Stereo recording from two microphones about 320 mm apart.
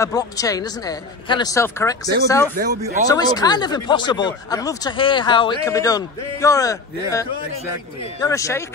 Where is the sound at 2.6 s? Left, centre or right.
Right.